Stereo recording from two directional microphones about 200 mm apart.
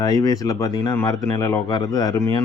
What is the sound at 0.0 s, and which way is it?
Speech, 20° left (ahead or behind).